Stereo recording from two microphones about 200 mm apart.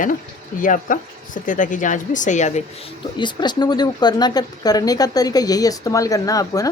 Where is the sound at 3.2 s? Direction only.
20° left (ahead or behind).